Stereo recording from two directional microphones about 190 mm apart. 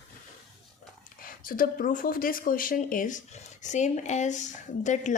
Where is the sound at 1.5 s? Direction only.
45° left (ahead or behind).